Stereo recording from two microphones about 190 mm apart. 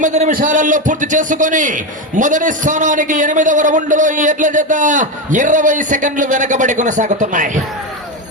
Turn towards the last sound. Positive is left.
turn(degrees=-40)  # may be behind; listen again after turning